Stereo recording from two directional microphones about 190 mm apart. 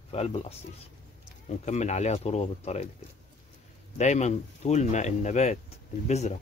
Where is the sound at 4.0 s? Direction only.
40° left (ahead or behind).